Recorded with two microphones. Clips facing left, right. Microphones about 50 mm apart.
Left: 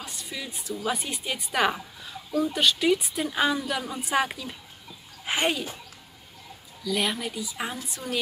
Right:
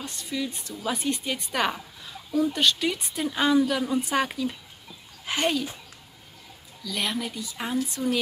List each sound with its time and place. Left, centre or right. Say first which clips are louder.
0.0 s a woman's voice: right 5 dB; centre
5.2 s speech: even; centre
6.8 s a woman's voice: left 2 dB; centre